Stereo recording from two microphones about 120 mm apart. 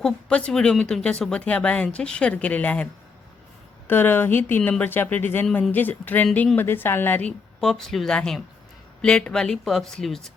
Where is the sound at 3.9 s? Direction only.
15° left (ahead or behind).